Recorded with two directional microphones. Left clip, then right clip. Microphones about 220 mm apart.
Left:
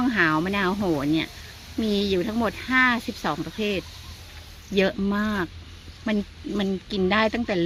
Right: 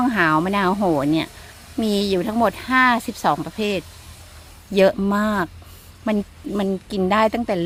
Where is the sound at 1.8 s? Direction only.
65° right (ahead or behind).